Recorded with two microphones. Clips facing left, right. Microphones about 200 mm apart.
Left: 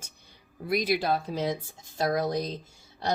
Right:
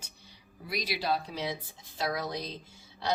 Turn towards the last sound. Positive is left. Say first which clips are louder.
# left 3 dB
turn(degrees=45)  # may be behind; listen again after turning